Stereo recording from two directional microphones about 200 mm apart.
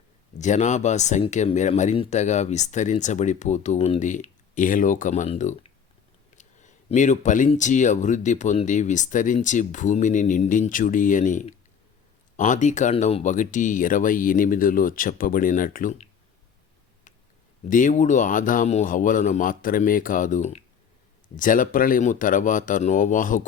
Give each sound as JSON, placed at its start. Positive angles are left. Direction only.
{"t": 0.3, "sound": "speech", "side_deg": 35}
{"t": 17.7, "sound": "speech", "side_deg": 40}